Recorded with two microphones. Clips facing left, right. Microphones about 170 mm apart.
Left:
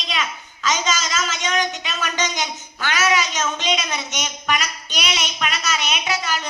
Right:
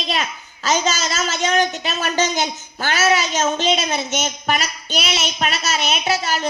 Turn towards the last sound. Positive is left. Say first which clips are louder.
# right 4 dB
turn(degrees=-30)  # may be behind; listen again after turning